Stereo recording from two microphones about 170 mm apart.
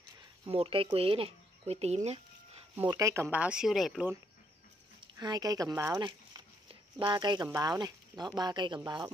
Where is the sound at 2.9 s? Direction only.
20° right (ahead or behind); by 4.1 s centre (ahead or behind).